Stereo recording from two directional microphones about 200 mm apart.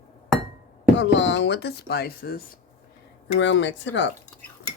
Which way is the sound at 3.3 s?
65° left (ahead or behind).